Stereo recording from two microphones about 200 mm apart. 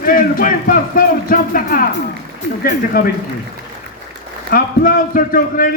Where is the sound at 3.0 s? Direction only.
50° left (ahead or behind).